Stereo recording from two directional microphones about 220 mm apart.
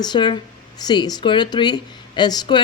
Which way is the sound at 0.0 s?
20° left (ahead or behind).